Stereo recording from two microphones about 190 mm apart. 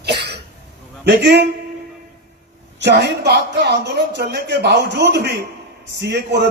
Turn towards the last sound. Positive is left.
turn(degrees=-65)  # may be behind; listen again after turning